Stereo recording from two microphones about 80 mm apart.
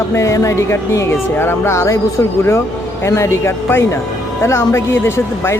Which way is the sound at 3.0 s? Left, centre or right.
Left.